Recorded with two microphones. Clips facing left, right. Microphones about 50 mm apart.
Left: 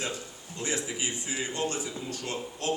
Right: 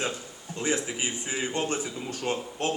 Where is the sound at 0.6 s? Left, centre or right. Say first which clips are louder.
Right 4 dB; right.